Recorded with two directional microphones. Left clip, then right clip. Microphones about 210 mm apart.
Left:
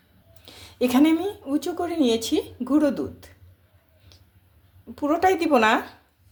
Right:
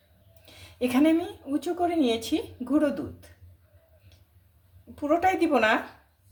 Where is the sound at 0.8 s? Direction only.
35° left (ahead or behind).